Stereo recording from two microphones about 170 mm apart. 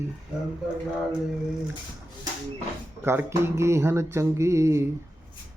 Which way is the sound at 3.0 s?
15° right (ahead or behind).